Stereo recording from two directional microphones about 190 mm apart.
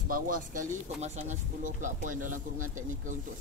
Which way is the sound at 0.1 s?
45° right (ahead or behind).